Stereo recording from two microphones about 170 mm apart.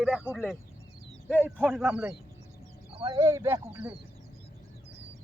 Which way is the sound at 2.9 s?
35° right (ahead or behind).